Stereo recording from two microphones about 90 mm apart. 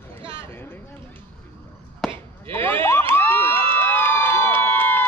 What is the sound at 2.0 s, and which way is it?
Chop, centre (ahead or behind).